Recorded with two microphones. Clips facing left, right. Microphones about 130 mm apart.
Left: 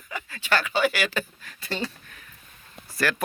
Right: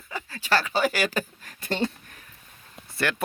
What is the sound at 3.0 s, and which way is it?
Speech, 25° right (ahead or behind).